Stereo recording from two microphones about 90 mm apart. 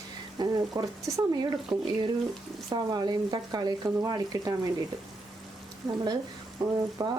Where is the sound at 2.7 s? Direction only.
50° right (ahead or behind).